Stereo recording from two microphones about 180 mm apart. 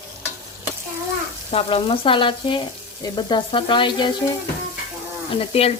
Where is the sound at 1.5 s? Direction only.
30° left (ahead or behind).